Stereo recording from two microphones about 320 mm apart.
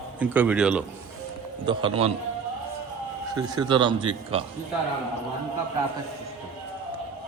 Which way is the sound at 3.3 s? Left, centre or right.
Centre.